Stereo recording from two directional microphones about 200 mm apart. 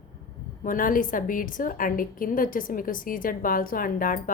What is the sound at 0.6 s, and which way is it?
A woman's voice, 45° left (ahead or behind).